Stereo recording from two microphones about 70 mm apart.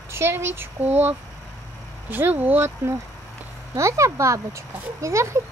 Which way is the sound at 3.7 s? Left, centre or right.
Right.